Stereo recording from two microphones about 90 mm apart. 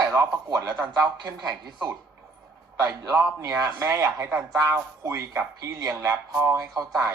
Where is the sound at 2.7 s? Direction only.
35° right (ahead or behind).